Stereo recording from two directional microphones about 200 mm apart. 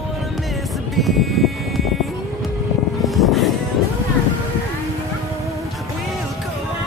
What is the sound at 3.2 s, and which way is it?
Music, centre (ahead or behind).